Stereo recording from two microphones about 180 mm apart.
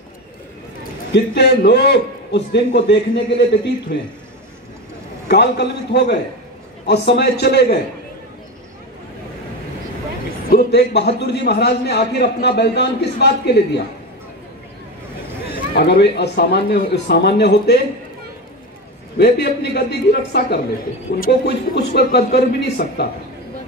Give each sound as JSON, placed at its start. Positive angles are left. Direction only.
{"t": 1.1, "sound": "a man's voice", "side_deg": 70}
{"t": 5.3, "sound": "a man's voice", "side_deg": 70}
{"t": 10.5, "sound": "a man's voice", "side_deg": 60}
{"t": 15.7, "sound": "a man's voice", "side_deg": 65}
{"t": 19.1, "sound": "a man's voice", "side_deg": 65}